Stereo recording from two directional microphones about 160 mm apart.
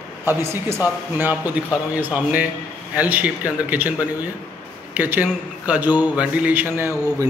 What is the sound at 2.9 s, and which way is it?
A man's voice, 10° right (ahead or behind).